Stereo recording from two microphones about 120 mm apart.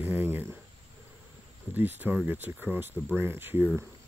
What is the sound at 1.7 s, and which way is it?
Speech, 15° right (ahead or behind).